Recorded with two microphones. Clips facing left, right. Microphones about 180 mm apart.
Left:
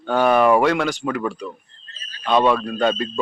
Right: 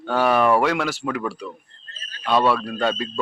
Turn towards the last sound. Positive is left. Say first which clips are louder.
# left 3 dB
turn(degrees=-5)  # may be behind; listen again after turning